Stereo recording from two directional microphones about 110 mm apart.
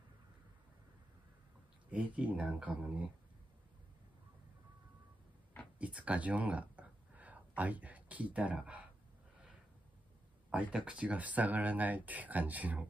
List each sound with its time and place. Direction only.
1.9 s speech: 15° right (ahead or behind)
5.8 s speech: 15° right (ahead or behind)
10.5 s speech: 15° right (ahead or behind)